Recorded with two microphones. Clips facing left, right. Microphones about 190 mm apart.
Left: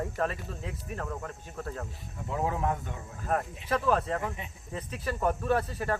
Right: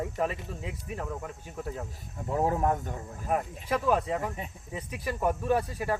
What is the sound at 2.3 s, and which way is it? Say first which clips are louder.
Speech: right 4 dB; 40° right (ahead or behind).